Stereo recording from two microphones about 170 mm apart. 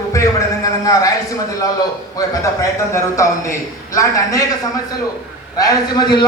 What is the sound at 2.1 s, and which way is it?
A man's voice, 20° left (ahead or behind).